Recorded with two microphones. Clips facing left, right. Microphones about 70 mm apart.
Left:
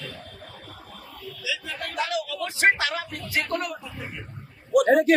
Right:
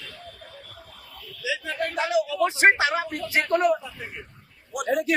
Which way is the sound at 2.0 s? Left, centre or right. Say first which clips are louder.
Right 6 dB; right.